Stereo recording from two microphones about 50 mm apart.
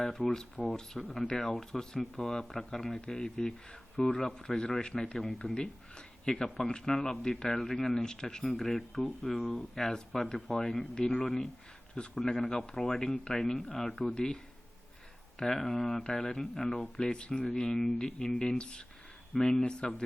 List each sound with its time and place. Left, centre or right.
0.0 s speech: centre
0.3 s speech: centre
5.1 s speech: centre
6.2 s speech: centre
10.9 s speech: centre
15.4 s speech: centre